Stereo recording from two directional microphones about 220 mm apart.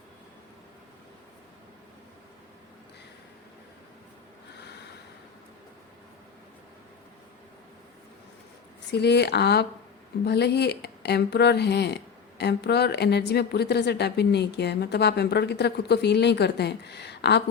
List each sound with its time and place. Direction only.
8.9 s a woman's voice: 50° left (ahead or behind)